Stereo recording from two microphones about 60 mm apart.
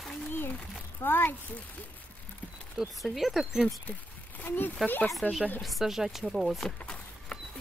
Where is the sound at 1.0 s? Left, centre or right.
Left.